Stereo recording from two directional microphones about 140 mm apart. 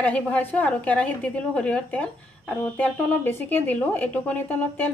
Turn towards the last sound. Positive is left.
turn(degrees=10)  # may be behind; listen again after turning